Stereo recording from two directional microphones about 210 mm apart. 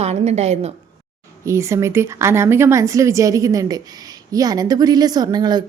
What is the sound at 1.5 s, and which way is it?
A woman's voice, 15° right (ahead or behind).